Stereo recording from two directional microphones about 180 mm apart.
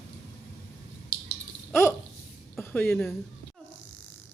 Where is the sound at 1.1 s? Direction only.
50° left (ahead or behind).